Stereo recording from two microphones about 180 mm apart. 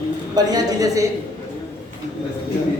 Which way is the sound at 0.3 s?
20° right (ahead or behind).